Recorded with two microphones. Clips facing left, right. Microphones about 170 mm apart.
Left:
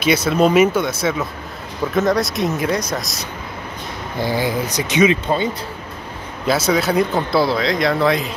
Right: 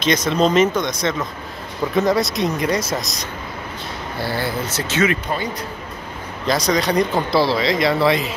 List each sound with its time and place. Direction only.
0.0 s speech: 10° left (ahead or behind)
4.2 s speech: 15° left (ahead or behind)
6.4 s speech: 5° left (ahead or behind)